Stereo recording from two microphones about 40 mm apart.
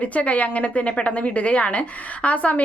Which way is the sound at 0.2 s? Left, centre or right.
Left.